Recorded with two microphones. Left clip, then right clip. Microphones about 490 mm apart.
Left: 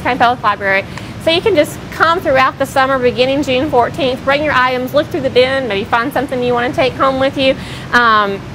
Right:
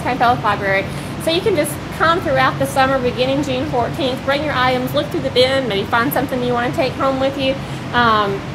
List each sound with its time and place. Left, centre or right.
0.0 s a woman's voice: left